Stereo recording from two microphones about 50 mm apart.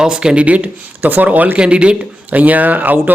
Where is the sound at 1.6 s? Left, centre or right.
Right.